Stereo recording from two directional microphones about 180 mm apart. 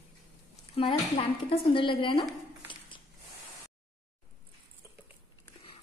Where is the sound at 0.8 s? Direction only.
30° left (ahead or behind).